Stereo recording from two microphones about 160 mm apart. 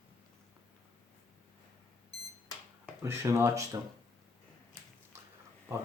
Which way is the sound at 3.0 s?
15° right (ahead or behind).